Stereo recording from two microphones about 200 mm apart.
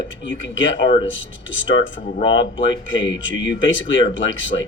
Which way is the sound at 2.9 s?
70° left (ahead or behind).